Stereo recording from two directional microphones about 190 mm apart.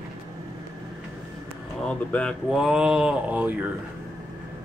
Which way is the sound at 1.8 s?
5° left (ahead or behind).